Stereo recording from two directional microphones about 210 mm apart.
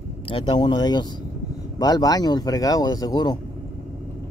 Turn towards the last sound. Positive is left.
turn(degrees=20)  # may be behind; listen again after turning